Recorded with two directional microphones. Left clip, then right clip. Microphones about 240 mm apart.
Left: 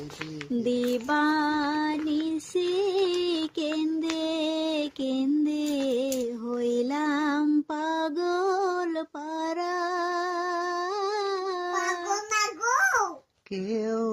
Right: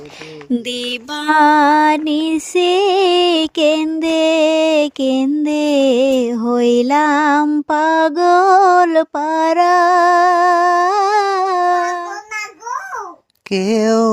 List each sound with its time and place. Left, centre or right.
0.7 s female singing: right
13.5 s speech: right